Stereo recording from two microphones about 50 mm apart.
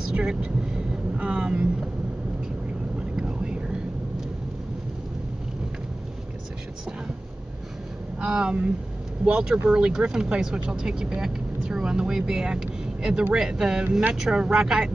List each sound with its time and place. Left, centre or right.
0.1 s vehicle: centre
3.2 s vehicle: centre
8.2 s speech: centre